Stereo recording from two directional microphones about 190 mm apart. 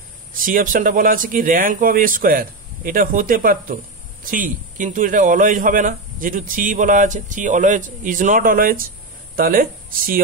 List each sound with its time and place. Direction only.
0.4 s a man's voice: 45° right (ahead or behind)